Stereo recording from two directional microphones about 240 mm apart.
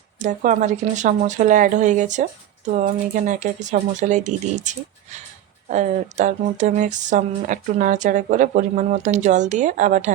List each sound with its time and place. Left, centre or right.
0.2 s speech: right